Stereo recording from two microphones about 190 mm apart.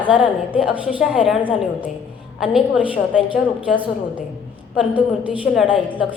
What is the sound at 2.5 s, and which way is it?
Speech, 5° right (ahead or behind).